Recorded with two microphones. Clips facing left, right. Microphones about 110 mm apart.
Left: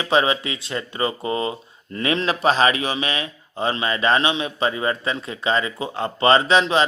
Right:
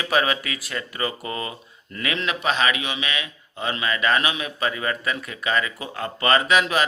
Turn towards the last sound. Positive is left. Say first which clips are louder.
# left 3 dB
turn(degrees=25)  # may be behind; listen again after turning